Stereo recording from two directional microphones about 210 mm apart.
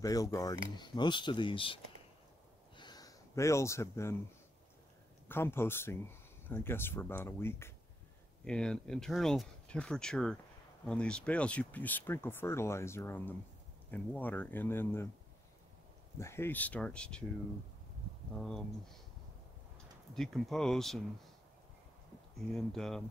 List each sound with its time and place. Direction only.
0.0 s speech: 15° left (ahead or behind)
2.7 s a sound: 20° left (ahead or behind)
5.3 s speech: 10° left (ahead or behind)
16.2 s speech: 10° left (ahead or behind)
18.4 s speech: 5° left (ahead or behind)
20.2 s speech: centre (ahead or behind)
22.5 s speech: centre (ahead or behind)